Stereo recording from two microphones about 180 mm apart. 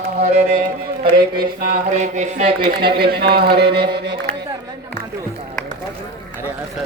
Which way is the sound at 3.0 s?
60° right (ahead or behind).